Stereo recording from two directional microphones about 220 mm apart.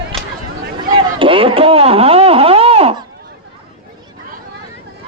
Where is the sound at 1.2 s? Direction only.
25° right (ahead or behind).